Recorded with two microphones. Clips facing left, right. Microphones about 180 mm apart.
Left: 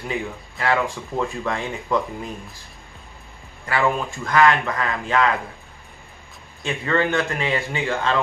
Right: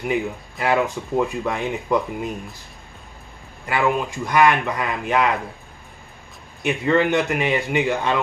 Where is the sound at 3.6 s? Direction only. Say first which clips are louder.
Right 1 dB; 15° right (ahead or behind).